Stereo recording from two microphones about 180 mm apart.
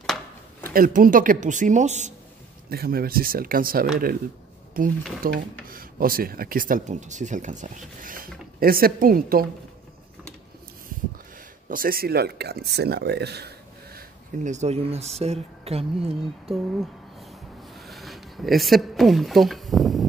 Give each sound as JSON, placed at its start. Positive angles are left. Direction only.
{"t": 0.0, "sound": "a sound", "side_deg": 0}
{"t": 0.7, "sound": "speech", "side_deg": -50}
{"t": 2.7, "sound": "speech", "side_deg": -55}
{"t": 11.7, "sound": "speech", "side_deg": -55}
{"t": 13.9, "sound": "speech", "side_deg": -40}
{"t": 17.7, "sound": "a sound", "side_deg": 0}